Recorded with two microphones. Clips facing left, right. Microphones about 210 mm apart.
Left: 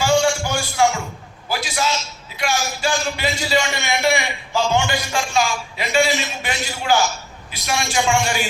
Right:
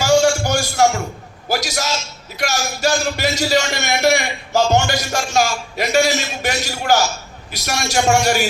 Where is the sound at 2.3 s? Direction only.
40° right (ahead or behind).